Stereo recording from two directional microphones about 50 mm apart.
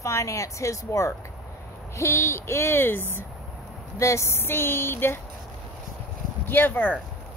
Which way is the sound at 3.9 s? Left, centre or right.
Left.